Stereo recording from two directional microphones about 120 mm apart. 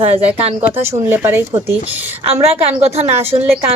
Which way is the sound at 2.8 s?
65° right (ahead or behind).